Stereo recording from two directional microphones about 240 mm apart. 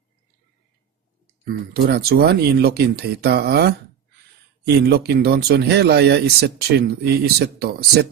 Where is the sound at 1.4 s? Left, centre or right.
Right.